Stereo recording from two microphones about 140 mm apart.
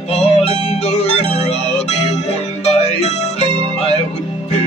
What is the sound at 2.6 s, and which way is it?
Music, 50° left (ahead or behind).